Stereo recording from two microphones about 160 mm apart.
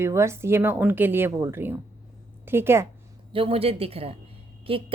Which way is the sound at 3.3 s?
35° right (ahead or behind).